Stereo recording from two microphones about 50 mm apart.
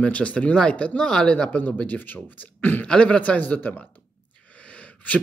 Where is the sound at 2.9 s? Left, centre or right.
Left.